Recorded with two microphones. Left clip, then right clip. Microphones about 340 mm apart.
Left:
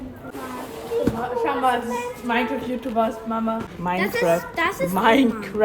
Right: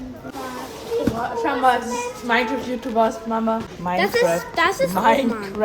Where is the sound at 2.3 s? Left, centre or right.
Right.